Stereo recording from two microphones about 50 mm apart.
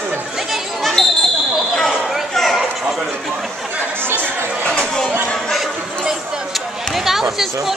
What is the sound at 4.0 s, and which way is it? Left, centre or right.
Chatter, right.